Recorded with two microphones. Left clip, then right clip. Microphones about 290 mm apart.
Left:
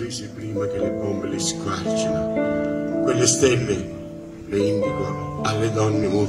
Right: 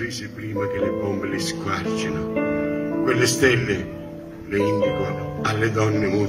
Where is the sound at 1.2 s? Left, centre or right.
Centre.